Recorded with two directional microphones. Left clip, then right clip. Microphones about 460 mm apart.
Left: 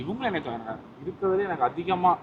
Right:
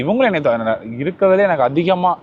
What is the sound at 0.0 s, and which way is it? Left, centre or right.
A man's voice, right.